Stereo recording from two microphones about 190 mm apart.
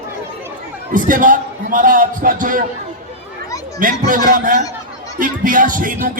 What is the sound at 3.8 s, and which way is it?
A man's voice, 45° right (ahead or behind).